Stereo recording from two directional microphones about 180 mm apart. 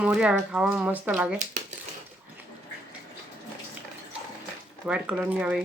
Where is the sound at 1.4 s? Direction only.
45° right (ahead or behind).